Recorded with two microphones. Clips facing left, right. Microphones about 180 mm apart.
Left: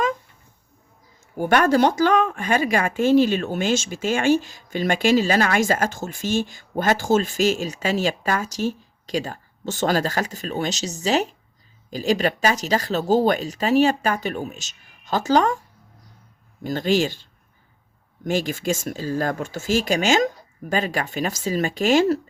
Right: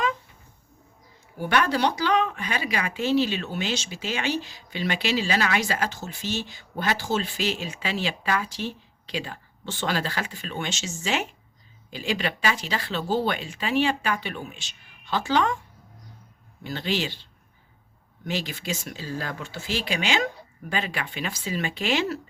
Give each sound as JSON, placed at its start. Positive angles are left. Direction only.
{"t": 1.4, "sound": "speech", "side_deg": 45}
{"t": 16.6, "sound": "speech", "side_deg": 45}
{"t": 18.3, "sound": "speech", "side_deg": 45}